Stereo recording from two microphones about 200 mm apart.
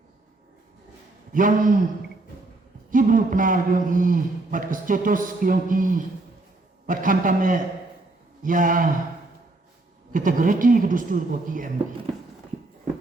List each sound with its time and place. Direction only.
1.3 s a man's voice: 40° right (ahead or behind)
2.9 s a man's voice: 40° right (ahead or behind)
10.1 s a man's voice: 40° right (ahead or behind)